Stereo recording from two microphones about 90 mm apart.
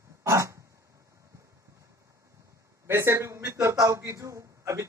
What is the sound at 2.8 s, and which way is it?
A man's voice, 30° right (ahead or behind).